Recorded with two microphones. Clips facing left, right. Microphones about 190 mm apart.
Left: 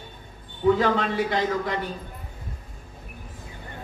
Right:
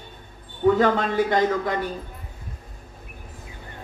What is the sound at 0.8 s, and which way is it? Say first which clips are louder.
Speech: right 3 dB; 45° right (ahead or behind).